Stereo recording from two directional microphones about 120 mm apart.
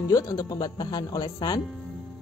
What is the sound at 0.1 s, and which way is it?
Speech, 30° left (ahead or behind).